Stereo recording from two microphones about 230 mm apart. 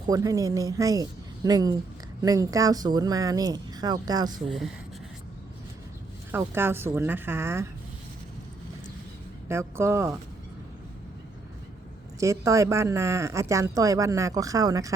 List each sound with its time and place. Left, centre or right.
0.0 s speech: centre
4.4 s speech: centre
6.3 s speech: centre
9.5 s speech: centre
12.2 s speech: centre